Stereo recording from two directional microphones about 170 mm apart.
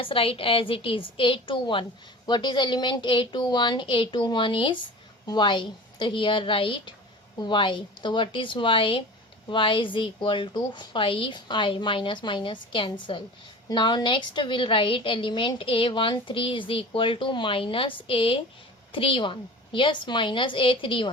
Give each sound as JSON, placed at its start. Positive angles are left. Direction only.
{"t": 0.0, "sound": "a woman's voice", "side_deg": 30}